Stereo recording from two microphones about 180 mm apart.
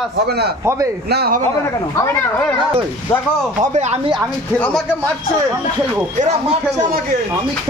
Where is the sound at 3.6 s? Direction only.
40° right (ahead or behind).